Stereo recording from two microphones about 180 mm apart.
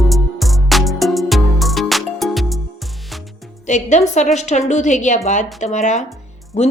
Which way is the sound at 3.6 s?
40° left (ahead or behind).